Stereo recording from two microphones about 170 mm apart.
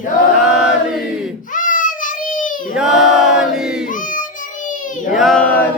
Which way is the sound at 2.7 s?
5° right (ahead or behind).